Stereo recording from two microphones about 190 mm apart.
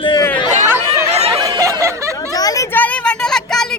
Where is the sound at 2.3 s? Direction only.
20° left (ahead or behind); by 3.6 s 5° left (ahead or behind).